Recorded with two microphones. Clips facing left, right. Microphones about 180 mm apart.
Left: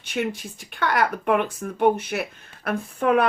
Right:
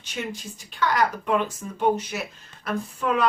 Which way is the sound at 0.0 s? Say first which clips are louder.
Left 6 dB; 60° left (ahead or behind).